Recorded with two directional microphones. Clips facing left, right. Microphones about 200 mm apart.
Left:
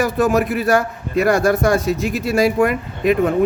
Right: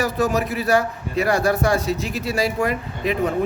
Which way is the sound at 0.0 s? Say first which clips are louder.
Left 4 dB; 50° left (ahead or behind).